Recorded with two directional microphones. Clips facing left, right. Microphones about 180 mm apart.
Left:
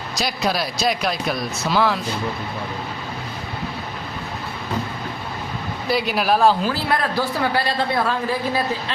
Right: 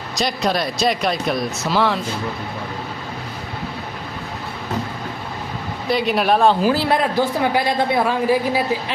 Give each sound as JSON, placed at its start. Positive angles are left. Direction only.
{"t": 0.2, "sound": "speech", "side_deg": 5}
{"t": 5.9, "sound": "speech", "side_deg": 0}
{"t": 6.9, "sound": "a woman's voice", "side_deg": -20}